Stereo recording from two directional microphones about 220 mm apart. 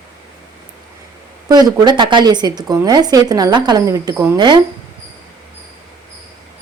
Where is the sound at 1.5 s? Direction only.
15° right (ahead or behind).